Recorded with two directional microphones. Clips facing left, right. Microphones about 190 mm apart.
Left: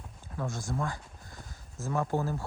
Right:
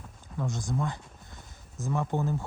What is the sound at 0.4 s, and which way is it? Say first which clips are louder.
Speech: right 2 dB; 20° right (ahead or behind).